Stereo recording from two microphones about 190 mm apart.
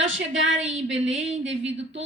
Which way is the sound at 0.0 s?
85° right.